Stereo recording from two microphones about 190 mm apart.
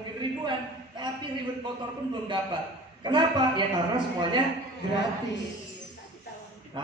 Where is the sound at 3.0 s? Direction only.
25° right (ahead or behind).